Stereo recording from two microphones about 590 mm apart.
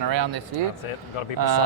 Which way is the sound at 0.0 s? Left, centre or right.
Right.